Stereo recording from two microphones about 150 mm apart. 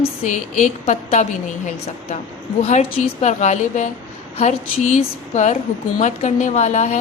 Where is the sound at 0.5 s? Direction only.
60° left (ahead or behind).